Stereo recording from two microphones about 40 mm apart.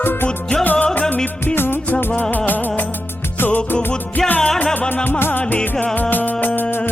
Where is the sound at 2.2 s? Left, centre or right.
Left.